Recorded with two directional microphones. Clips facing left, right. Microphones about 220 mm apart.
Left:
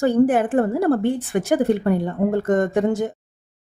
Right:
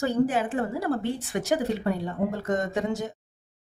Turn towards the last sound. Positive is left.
turn(degrees=55)  # may be behind; listen again after turning